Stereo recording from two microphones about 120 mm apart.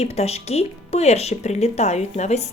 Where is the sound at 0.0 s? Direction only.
60° left (ahead or behind).